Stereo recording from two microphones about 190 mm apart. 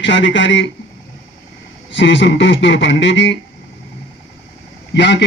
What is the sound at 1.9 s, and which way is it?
A man's voice, 75° left (ahead or behind).